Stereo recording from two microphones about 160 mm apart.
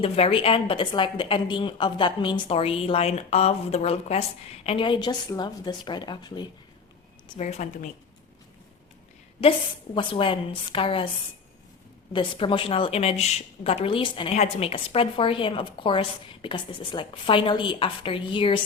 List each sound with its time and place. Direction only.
0.0 s a woman's voice: 35° left (ahead or behind)
7.3 s a woman's voice: 45° left (ahead or behind)
9.4 s a woman's voice: 35° left (ahead or behind)
12.1 s a woman's voice: 35° left (ahead or behind)